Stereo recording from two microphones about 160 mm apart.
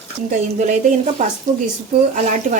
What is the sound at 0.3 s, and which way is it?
Speech, 50° right (ahead or behind).